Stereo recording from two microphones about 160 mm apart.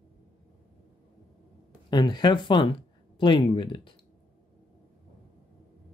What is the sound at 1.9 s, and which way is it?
Speech, 25° left (ahead or behind).